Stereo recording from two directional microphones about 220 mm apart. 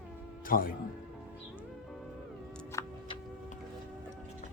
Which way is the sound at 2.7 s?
15° left (ahead or behind).